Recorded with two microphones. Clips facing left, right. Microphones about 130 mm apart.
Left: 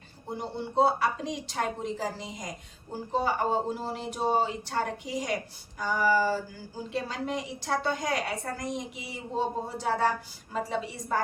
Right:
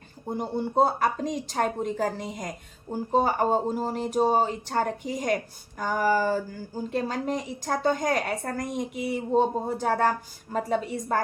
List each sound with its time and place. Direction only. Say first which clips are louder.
0.3 s speech: right 6 dB; 50° right (ahead or behind)